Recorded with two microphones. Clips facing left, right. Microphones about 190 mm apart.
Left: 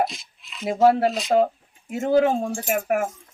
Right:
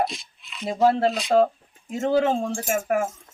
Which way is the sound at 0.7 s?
10° left (ahead or behind).